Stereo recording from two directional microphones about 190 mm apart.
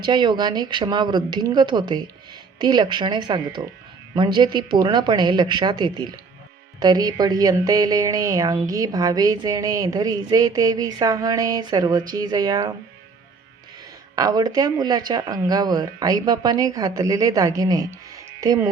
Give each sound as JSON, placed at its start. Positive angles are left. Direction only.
{"t": 0.0, "sound": "speech", "side_deg": -25}
{"t": 14.2, "sound": "speech", "side_deg": -20}